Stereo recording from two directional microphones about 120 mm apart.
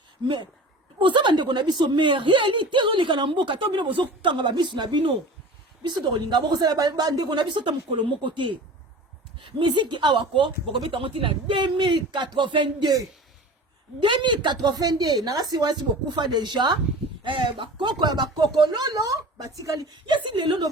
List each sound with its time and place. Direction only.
0.9 s a woman's voice: 40° right (ahead or behind)
14.0 s a woman's voice: 40° right (ahead or behind)
20.1 s a woman's voice: 40° right (ahead or behind)